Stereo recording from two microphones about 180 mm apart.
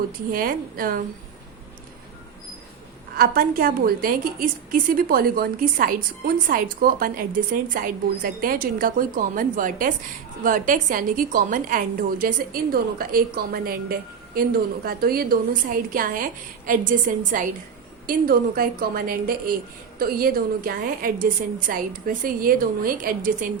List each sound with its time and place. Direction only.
0.3 s a woman's voice: 55° right (ahead or behind)
3.2 s a woman's voice: 50° right (ahead or behind)